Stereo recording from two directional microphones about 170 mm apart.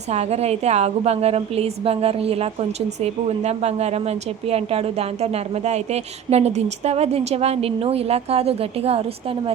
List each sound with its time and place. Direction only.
0.1 s a woman's voice: 40° right (ahead or behind)